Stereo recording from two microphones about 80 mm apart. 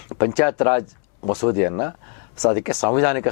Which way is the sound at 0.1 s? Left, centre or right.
Left.